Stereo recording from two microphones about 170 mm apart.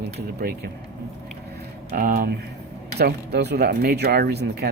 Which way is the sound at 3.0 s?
70° right (ahead or behind).